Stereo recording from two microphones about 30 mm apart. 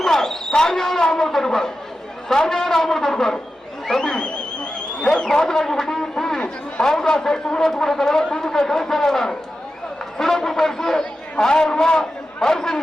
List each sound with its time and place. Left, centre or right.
0.1 s basketball bounce: centre
1.2 s speech: centre
4.2 s a sound: left
5.3 s a man's voice: centre